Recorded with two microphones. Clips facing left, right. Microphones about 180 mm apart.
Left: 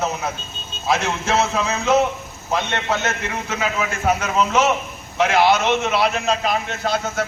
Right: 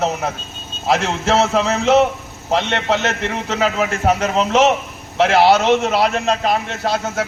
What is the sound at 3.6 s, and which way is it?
A man's voice, 35° right (ahead or behind).